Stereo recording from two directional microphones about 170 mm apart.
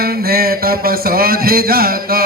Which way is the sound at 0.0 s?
65° right (ahead or behind).